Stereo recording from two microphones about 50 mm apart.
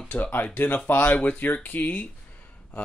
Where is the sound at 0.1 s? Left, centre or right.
Left.